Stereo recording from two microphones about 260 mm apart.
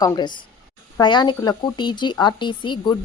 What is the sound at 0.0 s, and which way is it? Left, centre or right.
A woman's voice, centre.